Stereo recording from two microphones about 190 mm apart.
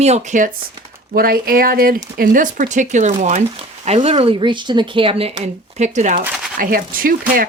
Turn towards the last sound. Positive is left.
turn(degrees=-50)  # may be behind; listen again after turning